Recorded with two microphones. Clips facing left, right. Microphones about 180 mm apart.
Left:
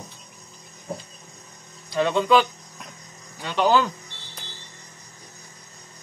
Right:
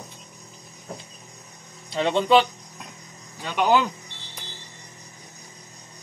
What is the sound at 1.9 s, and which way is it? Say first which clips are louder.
Speech: even; 25° right (ahead or behind).